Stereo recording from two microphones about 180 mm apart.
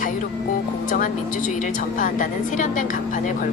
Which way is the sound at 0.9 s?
45° left (ahead or behind).